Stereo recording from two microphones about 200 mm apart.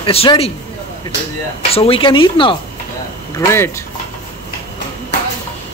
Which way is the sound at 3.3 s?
10° left (ahead or behind).